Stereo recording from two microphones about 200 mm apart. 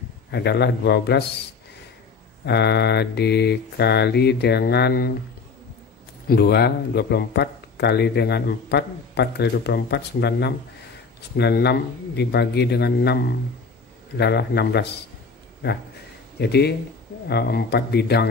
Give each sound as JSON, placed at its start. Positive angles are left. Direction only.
{"t": 0.3, "sound": "a man's voice", "side_deg": 55}
{"t": 2.4, "sound": "a man's voice", "side_deg": 55}
{"t": 6.2, "sound": "a man's voice", "side_deg": 55}
{"t": 16.3, "sound": "a man's voice", "side_deg": 55}